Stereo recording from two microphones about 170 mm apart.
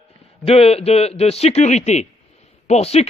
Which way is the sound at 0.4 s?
35° left (ahead or behind).